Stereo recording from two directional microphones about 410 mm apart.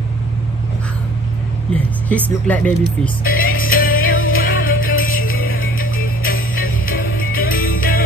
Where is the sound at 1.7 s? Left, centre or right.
Centre.